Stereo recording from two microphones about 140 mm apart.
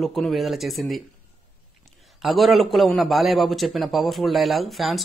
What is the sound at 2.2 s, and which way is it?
A man's voice, centre (ahead or behind).